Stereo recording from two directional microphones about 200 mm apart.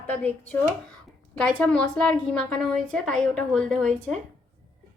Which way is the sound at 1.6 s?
5° left (ahead or behind).